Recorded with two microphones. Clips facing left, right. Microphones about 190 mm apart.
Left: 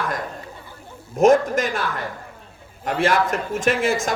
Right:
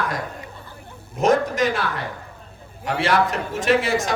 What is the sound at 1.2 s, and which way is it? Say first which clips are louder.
Speech: left 3 dB; 50° left (ahead or behind).